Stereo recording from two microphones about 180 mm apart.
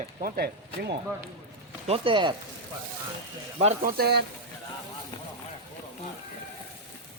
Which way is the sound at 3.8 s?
60° right (ahead or behind).